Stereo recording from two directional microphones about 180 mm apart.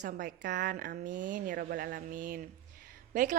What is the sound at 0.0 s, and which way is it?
A woman's voice, 50° right (ahead or behind).